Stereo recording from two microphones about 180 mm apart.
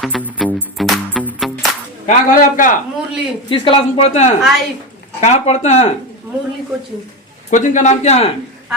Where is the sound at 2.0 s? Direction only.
45° left (ahead or behind).